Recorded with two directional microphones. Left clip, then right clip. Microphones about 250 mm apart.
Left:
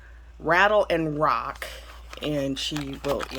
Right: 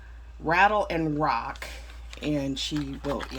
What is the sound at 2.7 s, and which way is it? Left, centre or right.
Speech, left.